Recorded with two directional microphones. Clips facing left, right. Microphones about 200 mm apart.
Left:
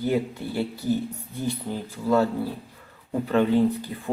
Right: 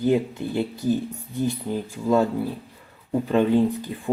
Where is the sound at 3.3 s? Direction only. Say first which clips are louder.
Right 1 dB; 15° right (ahead or behind).